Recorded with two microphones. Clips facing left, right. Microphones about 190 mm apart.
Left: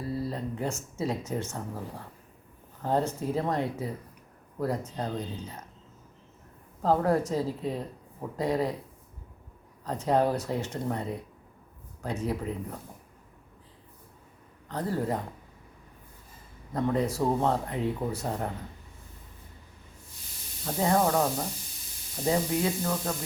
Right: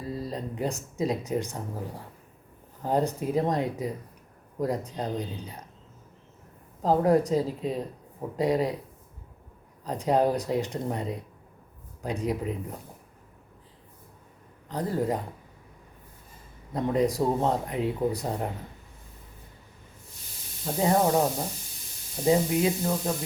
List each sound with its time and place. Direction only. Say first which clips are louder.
0.1 s speech: even; 15° right (ahead or behind)
2.8 s speech: right 2 dB; 15° right (ahead or behind)
6.8 s speech: right 3 dB; 15° right (ahead or behind)
9.8 s speech: right 2 dB; 15° right (ahead or behind)
14.7 s speech: right 2 dB; 15° right (ahead or behind)
16.7 s speech: right 2 dB; 15° right (ahead or behind)
20.7 s speech: right 2 dB; 20° right (ahead or behind)
22.3 s speech: right 4 dB; 20° right (ahead or behind)